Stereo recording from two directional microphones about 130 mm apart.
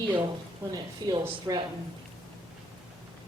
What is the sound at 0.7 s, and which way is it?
Speech, 30° right (ahead or behind).